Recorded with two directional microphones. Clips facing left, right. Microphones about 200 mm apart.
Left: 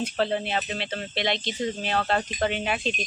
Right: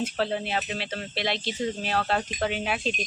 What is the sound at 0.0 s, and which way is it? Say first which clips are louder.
Speech: left 2 dB; 5° right (ahead or behind).